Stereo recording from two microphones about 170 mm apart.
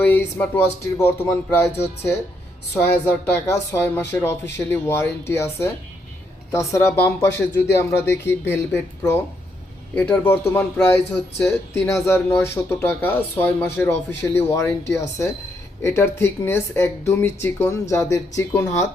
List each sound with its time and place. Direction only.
0.0 s a man's voice: 10° left (ahead or behind)
3.4 s a man's voice: 15° left (ahead or behind)